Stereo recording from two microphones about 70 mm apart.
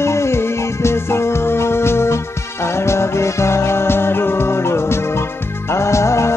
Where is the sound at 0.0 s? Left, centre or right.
Left.